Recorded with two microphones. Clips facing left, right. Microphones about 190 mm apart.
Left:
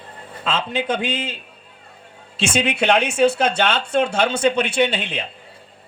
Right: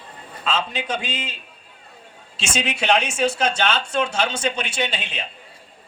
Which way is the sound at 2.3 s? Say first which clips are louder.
Left 6 dB; 60° left (ahead or behind).